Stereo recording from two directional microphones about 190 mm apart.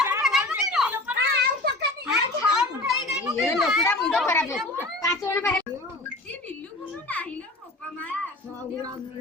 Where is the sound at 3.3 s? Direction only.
15° left (ahead or behind).